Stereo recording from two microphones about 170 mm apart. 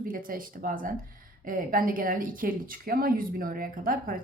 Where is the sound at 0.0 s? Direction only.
55° right (ahead or behind).